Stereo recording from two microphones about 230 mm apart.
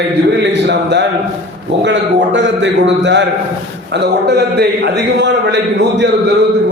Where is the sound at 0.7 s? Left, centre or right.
Right.